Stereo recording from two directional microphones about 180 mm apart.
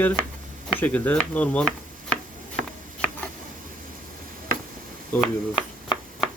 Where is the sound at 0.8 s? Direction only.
10° left (ahead or behind).